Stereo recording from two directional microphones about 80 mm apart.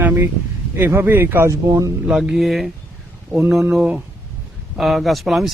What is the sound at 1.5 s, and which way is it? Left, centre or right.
Speech, right.